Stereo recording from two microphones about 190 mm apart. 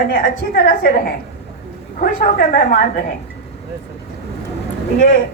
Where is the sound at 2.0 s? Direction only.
50° left (ahead or behind).